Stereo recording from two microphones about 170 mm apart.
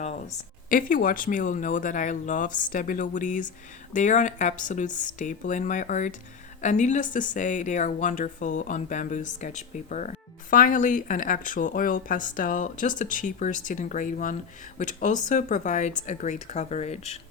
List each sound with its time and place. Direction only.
0.0 s speech: 40° left (ahead or behind)